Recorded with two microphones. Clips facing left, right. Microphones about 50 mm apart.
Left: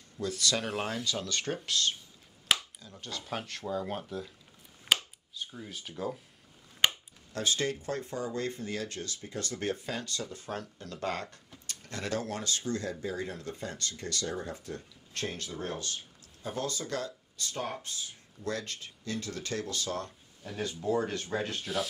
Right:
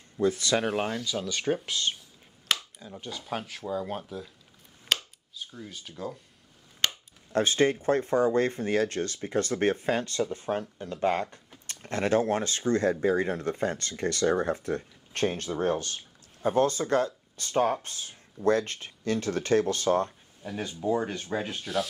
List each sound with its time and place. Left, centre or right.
0.2 s speech: right
0.7 s speech: centre
3.2 s speech: centre
4.8 s a sound: centre
6.8 s a sound: centre
7.3 s speech: right
20.4 s speech: centre